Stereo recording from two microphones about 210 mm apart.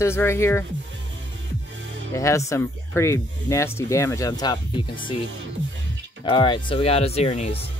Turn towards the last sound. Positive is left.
turn(degrees=30)  # may be behind; listen again after turning